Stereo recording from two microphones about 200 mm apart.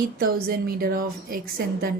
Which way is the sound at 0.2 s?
50° right (ahead or behind).